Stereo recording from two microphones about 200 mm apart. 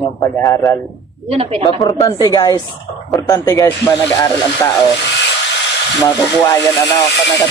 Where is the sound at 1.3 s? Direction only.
30° right (ahead or behind).